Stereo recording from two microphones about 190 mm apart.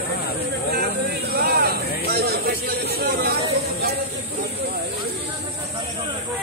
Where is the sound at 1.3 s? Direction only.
55° right (ahead or behind).